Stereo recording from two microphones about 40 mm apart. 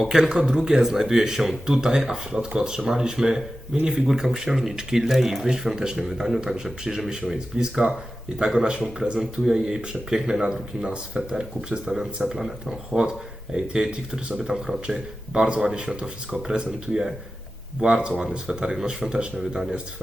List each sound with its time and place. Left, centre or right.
0.0 s speech: centre
10.8 s speech: right
11.9 s speech: centre